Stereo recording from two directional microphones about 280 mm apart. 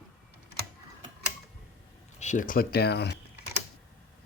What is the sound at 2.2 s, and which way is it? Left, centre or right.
Speech, left.